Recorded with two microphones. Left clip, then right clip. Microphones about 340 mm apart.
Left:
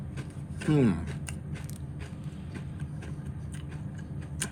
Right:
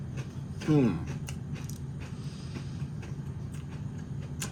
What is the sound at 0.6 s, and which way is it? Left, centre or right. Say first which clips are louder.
Speech: even; left.